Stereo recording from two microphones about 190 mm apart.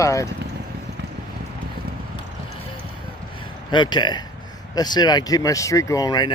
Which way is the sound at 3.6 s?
25° left (ahead or behind).